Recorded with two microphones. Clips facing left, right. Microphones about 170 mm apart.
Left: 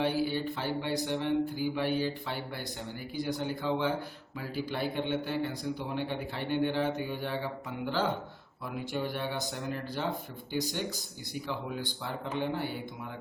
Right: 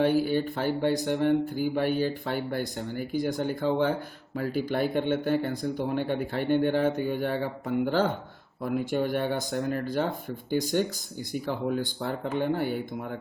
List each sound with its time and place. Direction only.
0.0 s speech: 50° right (ahead or behind)